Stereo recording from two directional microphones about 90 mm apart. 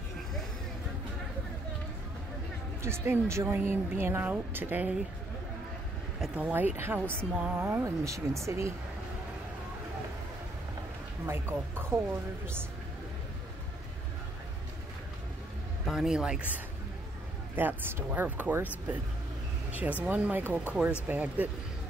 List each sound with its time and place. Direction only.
2.8 s speech: 30° right (ahead or behind)
6.3 s speech: 20° right (ahead or behind)
7.3 s a man's voice: 10° right (ahead or behind)
7.6 s speech: 35° right (ahead or behind)
11.2 s speech: 25° right (ahead or behind)
15.8 s a man's voice: centre (ahead or behind)
17.6 s a man's voice: 25° right (ahead or behind)